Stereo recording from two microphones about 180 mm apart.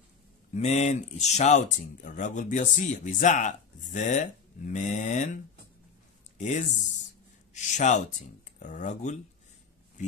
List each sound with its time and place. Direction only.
0.6 s speech: 35° left (ahead or behind)